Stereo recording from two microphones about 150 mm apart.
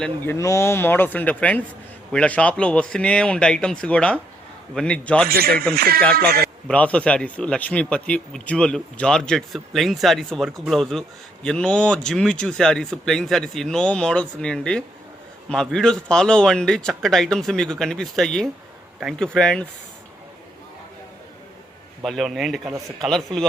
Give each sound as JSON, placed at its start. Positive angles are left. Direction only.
{"t": 0.0, "sound": "speech", "side_deg": 15}
{"t": 5.3, "sound": "a man's voice", "side_deg": -90}
{"t": 6.7, "sound": "speech", "side_deg": 10}
{"t": 22.0, "sound": "speech", "side_deg": 0}